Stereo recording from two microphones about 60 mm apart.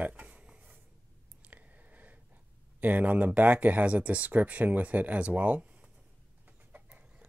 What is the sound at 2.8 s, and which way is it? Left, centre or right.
Speech, right.